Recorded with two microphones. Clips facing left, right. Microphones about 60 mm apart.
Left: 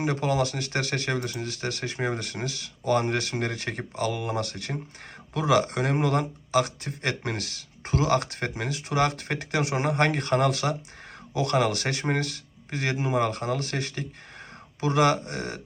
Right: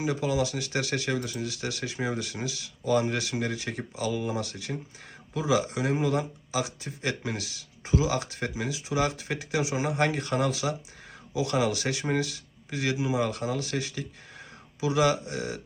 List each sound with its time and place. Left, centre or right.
0.0 s speech: left